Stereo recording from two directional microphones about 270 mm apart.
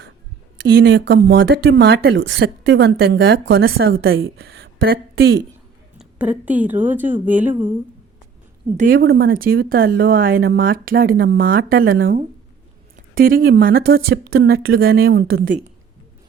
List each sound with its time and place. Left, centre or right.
0.7 s a woman's voice: right
6.0 s a woman's voice: centre
8.8 s speech: right